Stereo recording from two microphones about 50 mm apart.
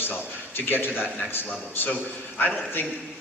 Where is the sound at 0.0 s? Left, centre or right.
Left.